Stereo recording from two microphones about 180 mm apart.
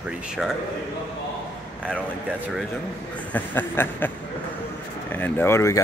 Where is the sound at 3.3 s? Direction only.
10° left (ahead or behind).